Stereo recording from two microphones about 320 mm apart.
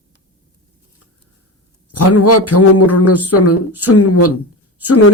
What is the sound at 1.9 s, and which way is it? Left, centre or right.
A man's voice, left.